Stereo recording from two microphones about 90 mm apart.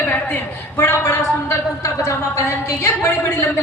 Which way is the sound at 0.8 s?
30° left (ahead or behind).